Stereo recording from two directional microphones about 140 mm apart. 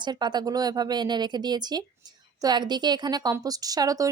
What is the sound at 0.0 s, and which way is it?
A woman's voice, 30° right (ahead or behind).